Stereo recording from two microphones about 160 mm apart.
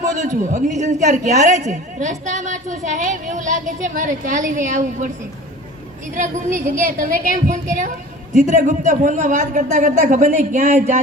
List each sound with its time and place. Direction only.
0.5 s a woman's voice: 50° right (ahead or behind)
6.1 s a woman's voice: 50° right (ahead or behind)